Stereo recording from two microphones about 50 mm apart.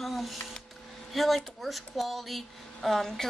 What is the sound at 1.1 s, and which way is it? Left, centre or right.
Speech, centre.